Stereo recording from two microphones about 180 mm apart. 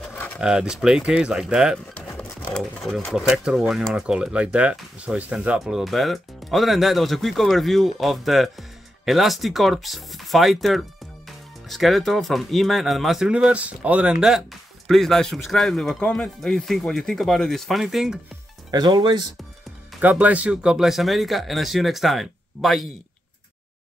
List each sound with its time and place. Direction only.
0.1 s a sound: 10° left (ahead or behind)
0.4 s speech: 5° right (ahead or behind)
2.0 s a sound: 10° left (ahead or behind)
2.5 s speech: 5° left (ahead or behind)
18.7 s speech: 25° right (ahead or behind)
20.0 s speech: 10° right (ahead or behind)